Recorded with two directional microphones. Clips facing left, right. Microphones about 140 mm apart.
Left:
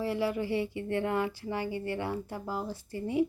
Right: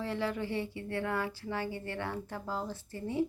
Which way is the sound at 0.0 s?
10° left (ahead or behind).